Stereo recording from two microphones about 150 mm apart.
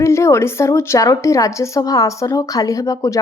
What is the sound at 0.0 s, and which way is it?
A woman's voice, 20° left (ahead or behind).